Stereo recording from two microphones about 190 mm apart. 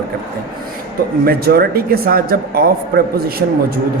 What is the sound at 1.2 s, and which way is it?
Speech, 55° right (ahead or behind).